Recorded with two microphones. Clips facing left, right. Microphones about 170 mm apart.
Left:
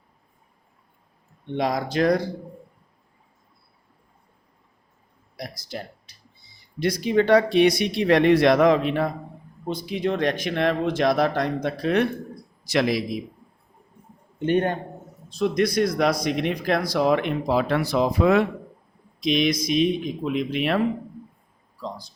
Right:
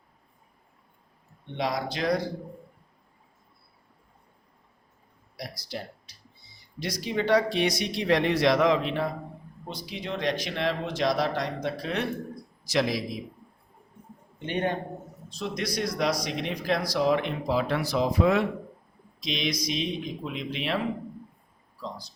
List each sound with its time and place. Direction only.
1.5 s speech: 45° left (ahead or behind)
5.4 s a sound: 50° left (ahead or behind)
6.7 s speech: 55° left (ahead or behind)
14.3 s speech: 50° left (ahead or behind)